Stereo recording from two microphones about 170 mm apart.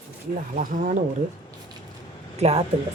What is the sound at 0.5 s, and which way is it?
Speech, 45° right (ahead or behind).